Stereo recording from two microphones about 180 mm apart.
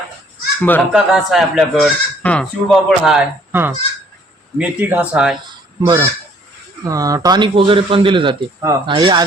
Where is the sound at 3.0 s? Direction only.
5° right (ahead or behind).